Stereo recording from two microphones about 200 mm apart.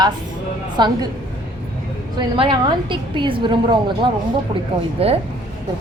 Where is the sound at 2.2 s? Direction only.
25° right (ahead or behind).